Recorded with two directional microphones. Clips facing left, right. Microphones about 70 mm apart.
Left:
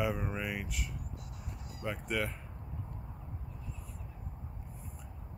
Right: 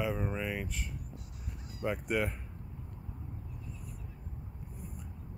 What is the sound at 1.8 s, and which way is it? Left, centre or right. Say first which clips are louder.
Speech: right 3 dB; centre.